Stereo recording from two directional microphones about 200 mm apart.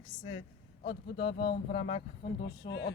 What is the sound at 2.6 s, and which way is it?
Speech, 60° left (ahead or behind).